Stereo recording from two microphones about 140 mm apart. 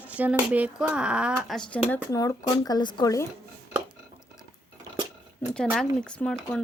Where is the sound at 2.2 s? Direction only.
25° left (ahead or behind).